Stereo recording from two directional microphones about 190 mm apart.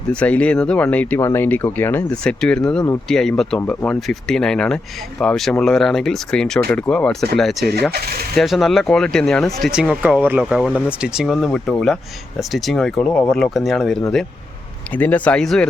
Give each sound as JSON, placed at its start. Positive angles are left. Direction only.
{"t": 0.1, "sound": "speech", "side_deg": 5}
{"t": 7.7, "sound": "speech", "side_deg": -55}
{"t": 8.4, "sound": "speech", "side_deg": 0}